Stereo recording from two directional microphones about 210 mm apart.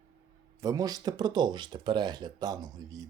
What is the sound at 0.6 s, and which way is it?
Speech, 15° right (ahead or behind).